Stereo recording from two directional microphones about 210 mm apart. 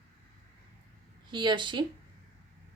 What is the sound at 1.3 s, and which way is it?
Speech, 20° right (ahead or behind).